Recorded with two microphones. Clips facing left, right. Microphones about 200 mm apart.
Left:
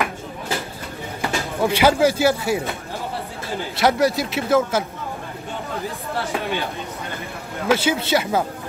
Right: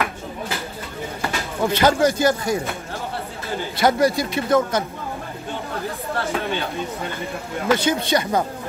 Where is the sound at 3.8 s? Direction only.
Centre (ahead or behind).